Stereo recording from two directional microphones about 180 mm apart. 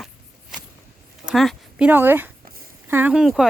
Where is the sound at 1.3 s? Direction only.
Centre (ahead or behind).